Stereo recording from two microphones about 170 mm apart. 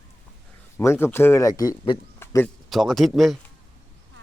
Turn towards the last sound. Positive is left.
turn(degrees=0)  # may be behind; listen again after turning